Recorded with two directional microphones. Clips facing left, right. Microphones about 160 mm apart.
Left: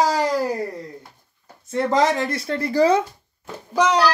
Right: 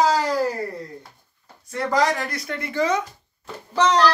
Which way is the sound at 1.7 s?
25° left (ahead or behind).